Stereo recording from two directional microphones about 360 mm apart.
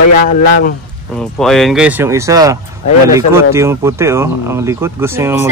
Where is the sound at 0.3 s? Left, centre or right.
Left.